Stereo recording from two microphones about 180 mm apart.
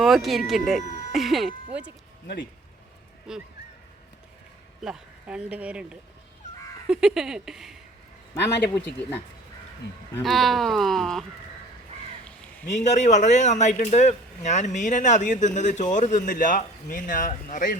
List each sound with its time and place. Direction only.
0.0 s speech: centre (ahead or behind)
2.2 s speech: 65° left (ahead or behind)
3.3 s speech: 5° right (ahead or behind)
4.8 s speech: 5° right (ahead or behind)
8.7 s speech: 10° left (ahead or behind)
10.2 s speech: centre (ahead or behind)
12.7 s speech: 40° left (ahead or behind)